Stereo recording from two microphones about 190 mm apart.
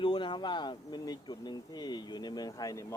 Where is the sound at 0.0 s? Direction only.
25° left (ahead or behind).